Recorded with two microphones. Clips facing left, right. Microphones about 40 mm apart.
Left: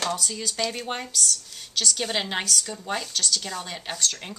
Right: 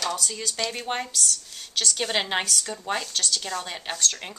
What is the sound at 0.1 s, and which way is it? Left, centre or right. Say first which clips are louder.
Speech: left 1 dB; centre.